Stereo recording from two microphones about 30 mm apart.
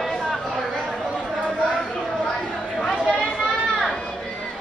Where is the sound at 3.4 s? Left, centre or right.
Centre.